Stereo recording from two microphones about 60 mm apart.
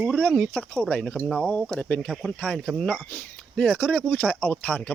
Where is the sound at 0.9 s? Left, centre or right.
Centre.